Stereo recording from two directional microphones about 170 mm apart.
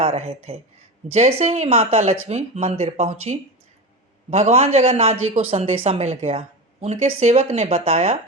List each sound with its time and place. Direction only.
0.0 s speech: 40° right (ahead or behind)